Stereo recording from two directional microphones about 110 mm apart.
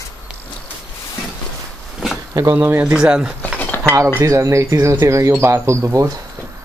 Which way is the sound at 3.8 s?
20° right (ahead or behind).